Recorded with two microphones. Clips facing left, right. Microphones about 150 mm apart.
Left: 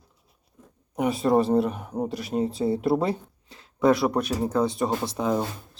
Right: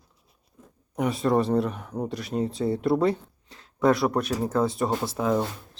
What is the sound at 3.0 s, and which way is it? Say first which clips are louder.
Speech: right 3 dB; centre (ahead or behind).